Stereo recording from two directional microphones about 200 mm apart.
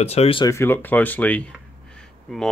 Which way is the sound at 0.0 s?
30° left (ahead or behind).